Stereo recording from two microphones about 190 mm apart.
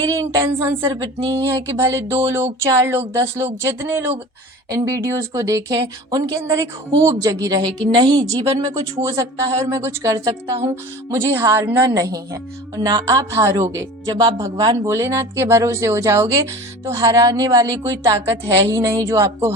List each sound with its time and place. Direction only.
0.1 s a woman's voice: 15° right (ahead or behind)